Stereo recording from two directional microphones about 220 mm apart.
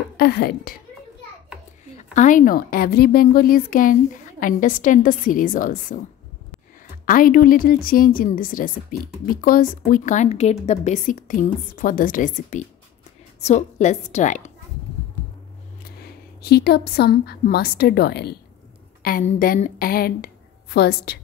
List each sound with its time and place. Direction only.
0.2 s speech: 45° left (ahead or behind)
2.0 s a woman's voice: 35° left (ahead or behind)
7.1 s a woman's voice: 40° left (ahead or behind)
15.8 s a woman's voice: 45° left (ahead or behind)